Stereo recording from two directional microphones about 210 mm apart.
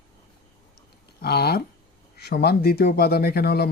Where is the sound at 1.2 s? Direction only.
50° left (ahead or behind).